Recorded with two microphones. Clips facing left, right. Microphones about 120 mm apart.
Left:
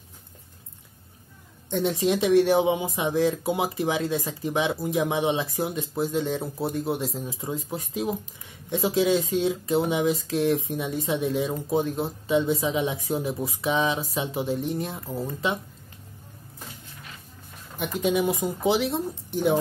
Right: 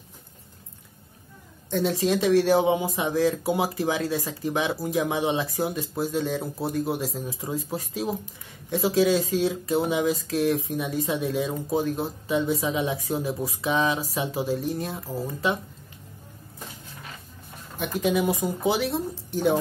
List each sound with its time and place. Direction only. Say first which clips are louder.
1.7 s speech: even; 20° left (ahead or behind)
17.7 s speech: even; 20° left (ahead or behind)